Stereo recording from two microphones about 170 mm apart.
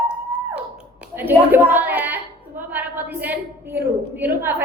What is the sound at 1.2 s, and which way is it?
A woman's voice, 10° right (ahead or behind).